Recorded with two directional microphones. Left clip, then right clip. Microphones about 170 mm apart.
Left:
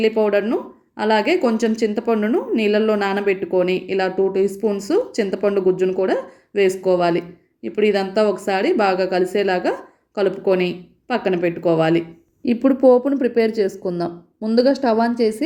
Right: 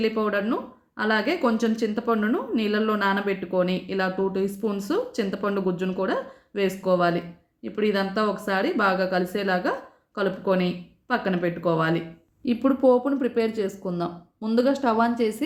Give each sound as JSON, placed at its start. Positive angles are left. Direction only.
{"t": 0.3, "sound": "speech", "side_deg": 20}
{"t": 10.4, "sound": "speech", "side_deg": -25}
{"t": 11.1, "sound": "speech", "side_deg": 20}